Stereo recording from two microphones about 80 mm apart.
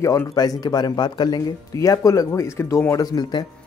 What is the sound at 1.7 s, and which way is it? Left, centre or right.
Speech, left.